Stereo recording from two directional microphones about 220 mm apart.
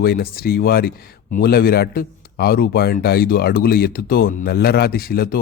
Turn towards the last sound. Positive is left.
turn(degrees=45)  # may be behind; listen again after turning